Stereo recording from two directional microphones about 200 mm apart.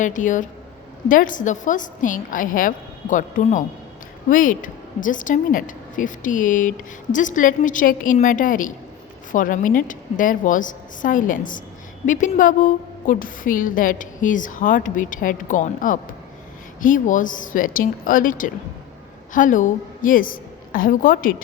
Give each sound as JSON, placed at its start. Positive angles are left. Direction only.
{"t": 0.0, "sound": "a woman's voice", "side_deg": 40}